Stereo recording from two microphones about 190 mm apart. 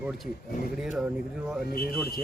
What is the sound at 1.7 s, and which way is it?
Speech, 50° left (ahead or behind).